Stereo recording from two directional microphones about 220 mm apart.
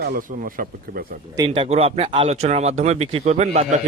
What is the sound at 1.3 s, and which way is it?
A man's voice, 20° right (ahead or behind).